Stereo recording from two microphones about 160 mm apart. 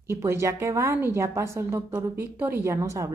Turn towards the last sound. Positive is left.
turn(degrees=-20)  # may be behind; listen again after turning